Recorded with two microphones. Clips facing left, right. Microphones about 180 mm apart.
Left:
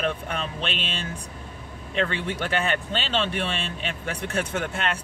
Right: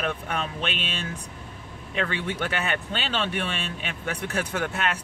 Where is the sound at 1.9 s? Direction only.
30° left (ahead or behind).